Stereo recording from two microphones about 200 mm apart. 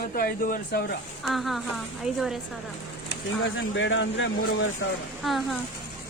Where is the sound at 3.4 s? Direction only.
65° left (ahead or behind).